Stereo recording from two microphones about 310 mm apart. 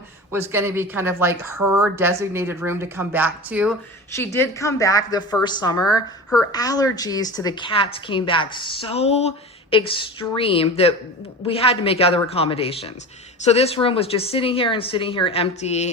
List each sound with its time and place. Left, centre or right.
0.3 s speech: centre
4.1 s speech: centre